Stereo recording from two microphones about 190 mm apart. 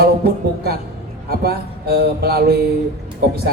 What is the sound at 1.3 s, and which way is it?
A man's voice, 55° right (ahead or behind).